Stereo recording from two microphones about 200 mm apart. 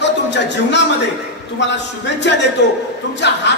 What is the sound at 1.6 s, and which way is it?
Speech, 60° left (ahead or behind).